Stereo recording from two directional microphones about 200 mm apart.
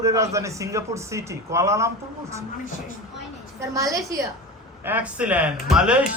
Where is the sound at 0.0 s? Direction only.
15° right (ahead or behind).